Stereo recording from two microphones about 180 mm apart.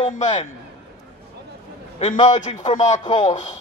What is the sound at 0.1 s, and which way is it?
Speech, 40° left (ahead or behind).